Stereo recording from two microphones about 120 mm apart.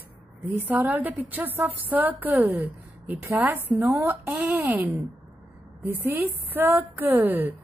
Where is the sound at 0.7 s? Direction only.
15° right (ahead or behind).